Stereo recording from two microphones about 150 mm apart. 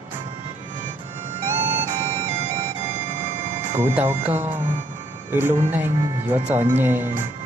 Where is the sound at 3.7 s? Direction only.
15° right (ahead or behind).